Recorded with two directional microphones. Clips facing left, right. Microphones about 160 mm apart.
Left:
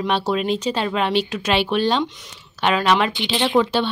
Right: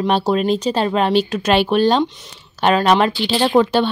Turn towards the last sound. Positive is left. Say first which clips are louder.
# right 4 dB
turn(degrees=-45)  # may be behind; listen again after turning